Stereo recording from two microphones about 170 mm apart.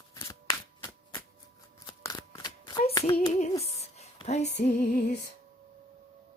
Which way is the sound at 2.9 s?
20° left (ahead or behind).